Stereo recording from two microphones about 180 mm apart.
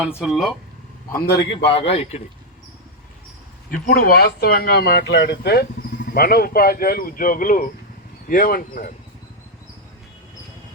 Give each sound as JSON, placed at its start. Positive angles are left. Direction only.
{"t": 0.0, "sound": "speech", "side_deg": -5}
{"t": 1.6, "sound": "speech", "side_deg": 30}
{"t": 3.7, "sound": "speech", "side_deg": 55}